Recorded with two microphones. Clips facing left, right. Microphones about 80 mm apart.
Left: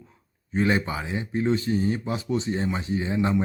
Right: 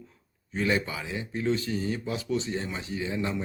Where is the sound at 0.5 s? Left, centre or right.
Left.